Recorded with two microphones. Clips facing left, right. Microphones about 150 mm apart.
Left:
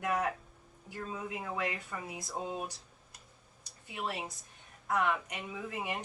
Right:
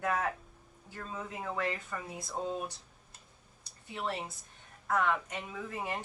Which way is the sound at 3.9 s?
15° left (ahead or behind).